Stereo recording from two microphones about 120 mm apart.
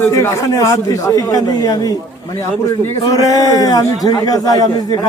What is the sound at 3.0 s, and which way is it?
A man's voice, 30° left (ahead or behind).